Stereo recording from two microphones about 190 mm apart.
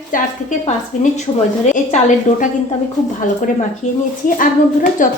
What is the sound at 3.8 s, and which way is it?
A woman's voice, 40° left (ahead or behind).